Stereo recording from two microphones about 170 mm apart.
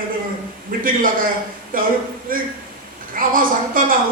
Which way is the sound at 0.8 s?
55° right (ahead or behind).